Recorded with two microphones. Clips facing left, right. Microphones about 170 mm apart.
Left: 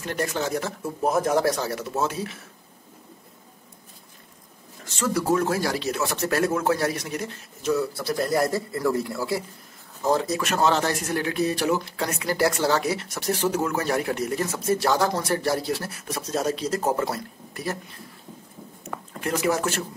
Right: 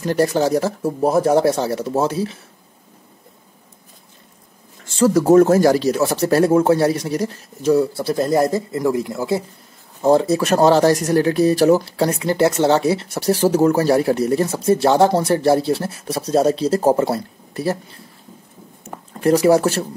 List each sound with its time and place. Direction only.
0.0 s speech: 35° right (ahead or behind)
4.8 s speech: 35° right (ahead or behind)
18.9 s speech: 35° right (ahead or behind)